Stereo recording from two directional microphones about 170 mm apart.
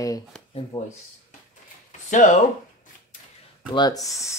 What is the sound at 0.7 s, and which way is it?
Speech, 20° left (ahead or behind).